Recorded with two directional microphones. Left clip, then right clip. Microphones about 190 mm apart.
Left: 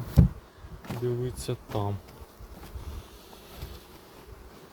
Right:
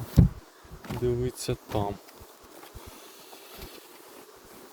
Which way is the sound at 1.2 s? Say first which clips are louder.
Right 3 dB; 40° right (ahead or behind).